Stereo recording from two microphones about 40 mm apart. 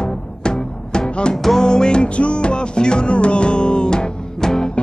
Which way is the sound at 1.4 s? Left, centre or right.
Centre.